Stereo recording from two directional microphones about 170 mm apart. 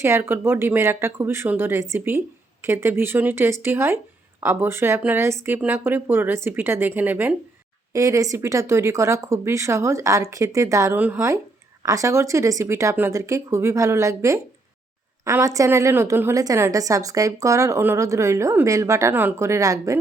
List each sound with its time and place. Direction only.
0.0 s speech: 15° right (ahead or behind)